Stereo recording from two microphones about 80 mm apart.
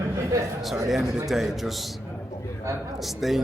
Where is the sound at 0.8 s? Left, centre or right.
Centre.